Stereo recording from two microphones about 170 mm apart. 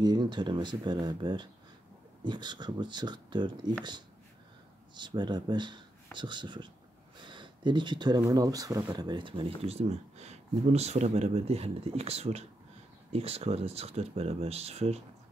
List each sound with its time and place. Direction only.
0.0 s speech: 25° right (ahead or behind)
4.9 s speech: 25° right (ahead or behind)